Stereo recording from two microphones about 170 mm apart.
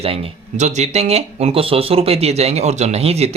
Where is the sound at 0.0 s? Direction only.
40° right (ahead or behind).